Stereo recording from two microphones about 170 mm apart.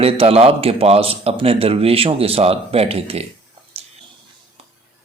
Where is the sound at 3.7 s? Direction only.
35° right (ahead or behind).